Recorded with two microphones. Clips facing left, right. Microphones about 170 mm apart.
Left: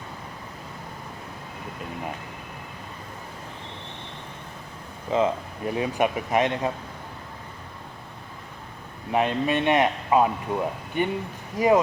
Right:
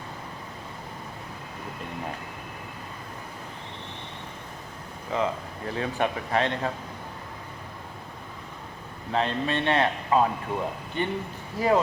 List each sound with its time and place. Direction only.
5.1 s speech: 20° left (ahead or behind)
9.1 s speech: 15° left (ahead or behind)